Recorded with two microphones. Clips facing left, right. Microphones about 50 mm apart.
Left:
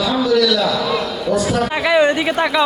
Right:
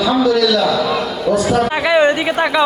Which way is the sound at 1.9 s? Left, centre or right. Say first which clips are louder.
Right 1 dB; right.